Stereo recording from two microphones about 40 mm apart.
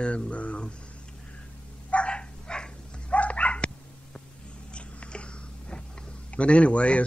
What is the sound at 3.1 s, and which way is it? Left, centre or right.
Dog, left.